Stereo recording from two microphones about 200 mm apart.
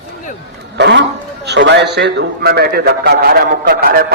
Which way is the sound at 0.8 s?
60° right (ahead or behind).